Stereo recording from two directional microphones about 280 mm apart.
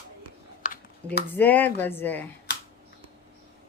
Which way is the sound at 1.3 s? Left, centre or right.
Centre.